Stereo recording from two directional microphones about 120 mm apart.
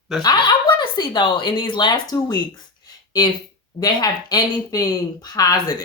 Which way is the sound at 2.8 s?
35° left (ahead or behind).